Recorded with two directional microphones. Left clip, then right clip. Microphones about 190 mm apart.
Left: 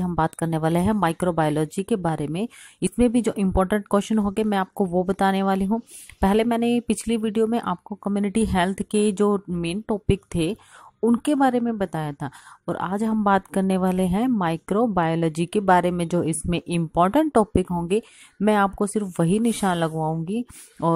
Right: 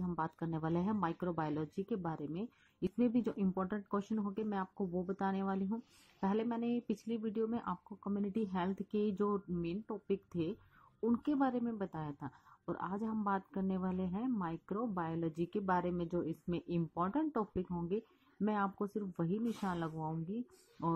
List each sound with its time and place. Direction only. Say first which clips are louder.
0.0 s speech: left 16 dB; 35° left (ahead or behind)